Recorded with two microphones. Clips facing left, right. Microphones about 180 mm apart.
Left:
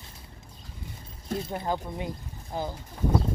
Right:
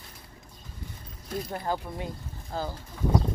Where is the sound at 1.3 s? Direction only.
25° left (ahead or behind).